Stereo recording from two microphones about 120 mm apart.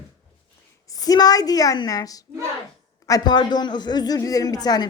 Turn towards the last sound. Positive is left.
turn(degrees=35)  # may be behind; listen again after turning